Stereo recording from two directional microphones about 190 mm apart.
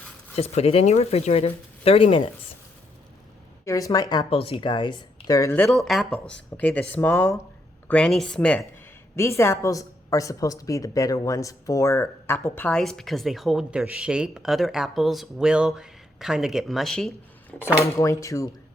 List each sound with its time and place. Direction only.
0.3 s speech: 35° left (ahead or behind)
3.7 s speech: 20° left (ahead or behind)
5.6 s a woman's voice: centre (ahead or behind)
17.7 s speech: 15° left (ahead or behind)